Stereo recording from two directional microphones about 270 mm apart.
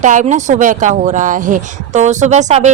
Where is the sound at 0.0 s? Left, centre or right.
Right.